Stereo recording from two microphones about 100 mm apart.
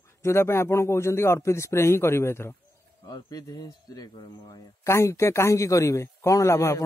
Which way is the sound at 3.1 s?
40° left (ahead or behind).